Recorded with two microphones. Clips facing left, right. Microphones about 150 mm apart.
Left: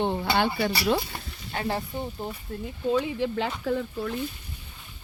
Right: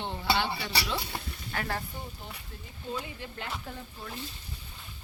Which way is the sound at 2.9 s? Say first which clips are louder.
Left 12 dB; 90° left.